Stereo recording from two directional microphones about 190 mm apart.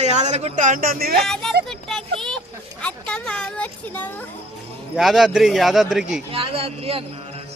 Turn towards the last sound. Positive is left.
turn(degrees=-30)  # may be behind; listen again after turning